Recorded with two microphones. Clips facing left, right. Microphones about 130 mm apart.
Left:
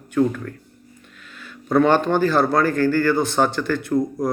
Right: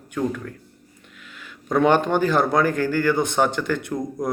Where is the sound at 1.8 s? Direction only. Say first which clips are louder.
Even; 15° right (ahead or behind).